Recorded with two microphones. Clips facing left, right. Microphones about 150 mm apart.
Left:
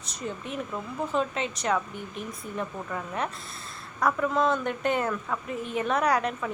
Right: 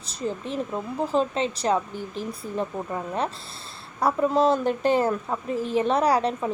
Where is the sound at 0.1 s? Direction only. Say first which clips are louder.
Right 5 dB; 30° right (ahead or behind).